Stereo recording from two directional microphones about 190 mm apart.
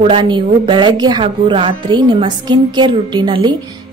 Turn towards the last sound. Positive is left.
turn(degrees=-25)  # may be behind; listen again after turning